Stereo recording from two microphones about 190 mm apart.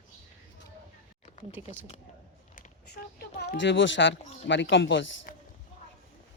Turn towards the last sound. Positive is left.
turn(degrees=45)  # may be behind; listen again after turning